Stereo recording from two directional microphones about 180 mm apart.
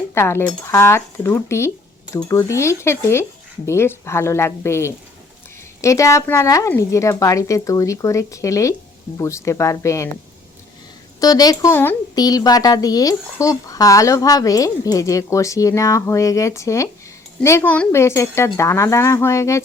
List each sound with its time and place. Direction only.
0.1 s speech: 15° left (ahead or behind)
11.2 s speech: 20° left (ahead or behind)